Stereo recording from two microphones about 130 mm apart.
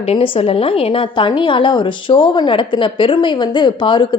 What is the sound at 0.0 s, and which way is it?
A woman's voice, 50° left (ahead or behind).